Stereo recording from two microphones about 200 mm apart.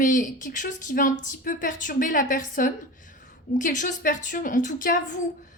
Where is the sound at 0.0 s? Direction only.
40° left (ahead or behind).